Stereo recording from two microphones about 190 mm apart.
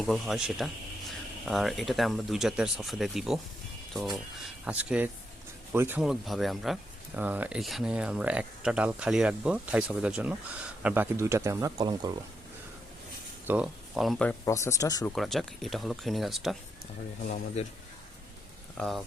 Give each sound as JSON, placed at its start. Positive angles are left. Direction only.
{"t": 0.0, "sound": "speech", "side_deg": 0}
{"t": 4.6, "sound": "speech", "side_deg": -5}
{"t": 13.5, "sound": "speech", "side_deg": -5}
{"t": 14.4, "sound": "speech", "side_deg": 15}
{"t": 15.1, "sound": "speech", "side_deg": 0}
{"t": 18.8, "sound": "speech", "side_deg": 0}